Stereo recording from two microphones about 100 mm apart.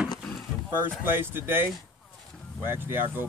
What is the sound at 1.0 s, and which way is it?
Speech, 20° right (ahead or behind).